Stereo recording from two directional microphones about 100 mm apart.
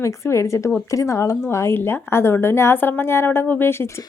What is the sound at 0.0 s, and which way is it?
A woman's voice, 30° left (ahead or behind).